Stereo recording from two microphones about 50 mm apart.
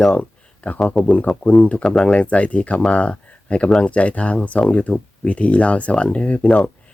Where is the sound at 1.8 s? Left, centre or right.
Centre.